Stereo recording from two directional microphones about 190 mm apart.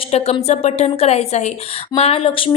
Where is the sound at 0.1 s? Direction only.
30° left (ahead or behind).